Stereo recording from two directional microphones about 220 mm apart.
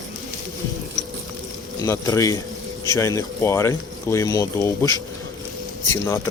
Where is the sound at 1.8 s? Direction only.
15° left (ahead or behind).